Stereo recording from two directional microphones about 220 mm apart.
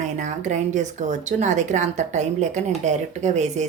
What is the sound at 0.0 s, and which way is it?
Speech, 35° right (ahead or behind).